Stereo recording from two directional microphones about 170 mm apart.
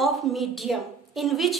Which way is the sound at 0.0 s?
Centre (ahead or behind).